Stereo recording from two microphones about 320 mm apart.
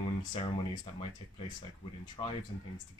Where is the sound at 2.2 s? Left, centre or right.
Centre.